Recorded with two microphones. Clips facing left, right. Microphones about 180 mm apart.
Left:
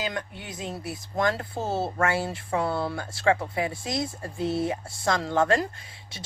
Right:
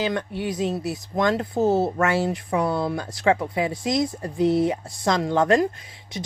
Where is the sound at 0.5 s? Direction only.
20° right (ahead or behind).